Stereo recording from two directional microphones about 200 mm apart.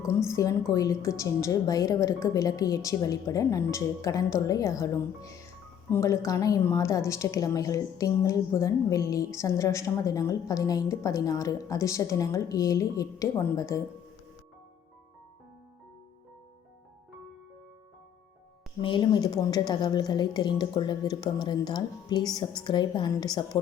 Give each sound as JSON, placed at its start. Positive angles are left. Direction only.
{"t": 0.3, "sound": "a woman's voice", "side_deg": 15}
{"t": 18.8, "sound": "a woman's voice", "side_deg": 25}